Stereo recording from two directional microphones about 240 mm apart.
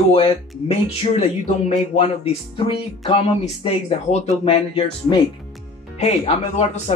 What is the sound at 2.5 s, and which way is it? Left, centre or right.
Speech, left.